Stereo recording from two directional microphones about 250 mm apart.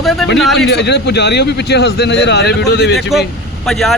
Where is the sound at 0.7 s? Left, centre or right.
Left.